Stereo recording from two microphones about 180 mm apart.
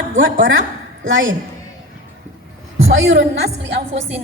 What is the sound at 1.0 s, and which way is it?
Speech, 90° right.